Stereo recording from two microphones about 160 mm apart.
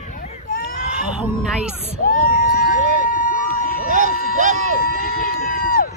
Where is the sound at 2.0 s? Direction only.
65° left (ahead or behind).